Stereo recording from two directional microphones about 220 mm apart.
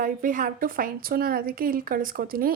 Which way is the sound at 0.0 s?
40° right (ahead or behind).